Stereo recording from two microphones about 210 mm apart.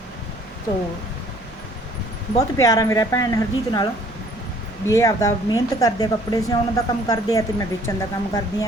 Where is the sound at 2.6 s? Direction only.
15° left (ahead or behind).